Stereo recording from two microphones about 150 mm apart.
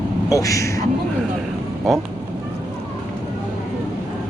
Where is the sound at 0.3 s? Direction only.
20° left (ahead or behind).